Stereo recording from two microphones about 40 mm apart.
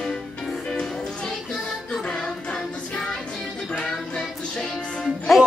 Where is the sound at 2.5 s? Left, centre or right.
Left.